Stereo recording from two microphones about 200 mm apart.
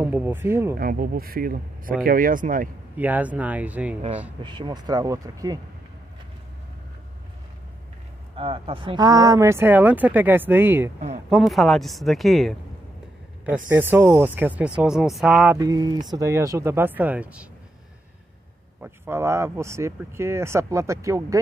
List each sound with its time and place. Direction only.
0.0 s speech: 10° right (ahead or behind)
0.7 s speech: 45° right (ahead or behind)
3.0 s speech: 10° right (ahead or behind)
4.4 s speech: 25° right (ahead or behind)
8.4 s speech: 25° right (ahead or behind); by 12.5 s centre (ahead or behind)
13.7 s speech: 10° right (ahead or behind)
15.5 s speech: 15° right (ahead or behind)
18.8 s speech: 10° right (ahead or behind)